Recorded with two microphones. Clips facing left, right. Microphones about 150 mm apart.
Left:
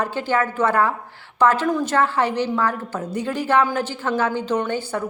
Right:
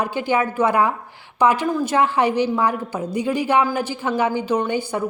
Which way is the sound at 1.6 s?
5° right (ahead or behind).